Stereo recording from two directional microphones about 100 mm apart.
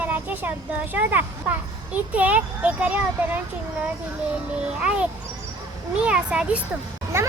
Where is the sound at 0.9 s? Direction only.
15° right (ahead or behind).